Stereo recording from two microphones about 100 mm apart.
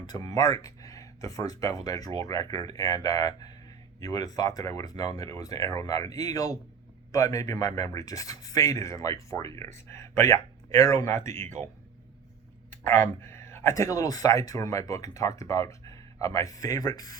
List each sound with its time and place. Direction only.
0.0 s speech: 40° left (ahead or behind); by 11.5 s 25° left (ahead or behind)
12.8 s speech: 25° left (ahead or behind)